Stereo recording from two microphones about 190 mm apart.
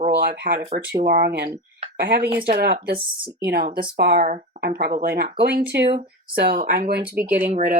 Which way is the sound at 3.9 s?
65° right (ahead or behind).